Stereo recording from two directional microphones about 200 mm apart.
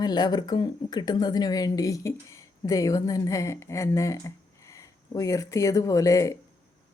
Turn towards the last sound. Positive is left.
turn(degrees=15)  # may be behind; listen again after turning